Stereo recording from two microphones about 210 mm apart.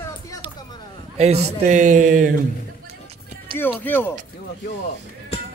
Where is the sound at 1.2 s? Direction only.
35° right (ahead or behind).